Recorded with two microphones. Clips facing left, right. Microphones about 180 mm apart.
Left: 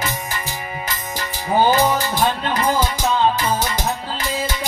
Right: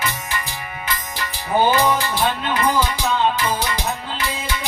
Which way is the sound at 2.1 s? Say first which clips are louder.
Left 1 dB; 45° left (ahead or behind).